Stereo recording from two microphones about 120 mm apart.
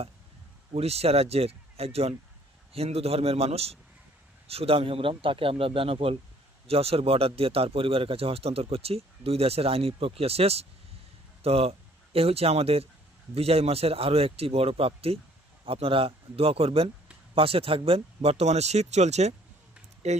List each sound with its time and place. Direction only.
0.7 s a man's voice: 60° right (ahead or behind)